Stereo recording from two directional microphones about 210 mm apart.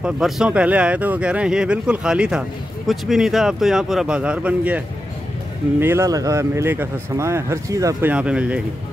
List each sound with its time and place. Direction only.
0.0 s speech: 5° right (ahead or behind)